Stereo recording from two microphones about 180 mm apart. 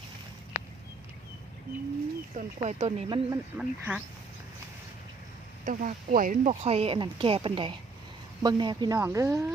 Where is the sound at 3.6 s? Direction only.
10° right (ahead or behind).